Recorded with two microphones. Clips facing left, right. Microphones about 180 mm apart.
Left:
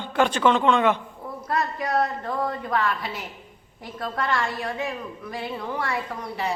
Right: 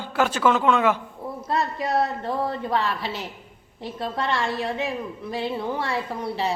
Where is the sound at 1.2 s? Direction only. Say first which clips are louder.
Right 1 dB; 25° right (ahead or behind).